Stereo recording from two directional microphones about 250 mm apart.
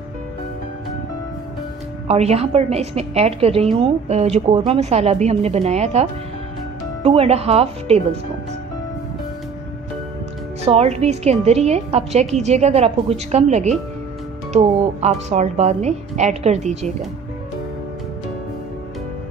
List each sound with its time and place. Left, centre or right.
2.0 s a woman's voice: right
10.6 s a woman's voice: right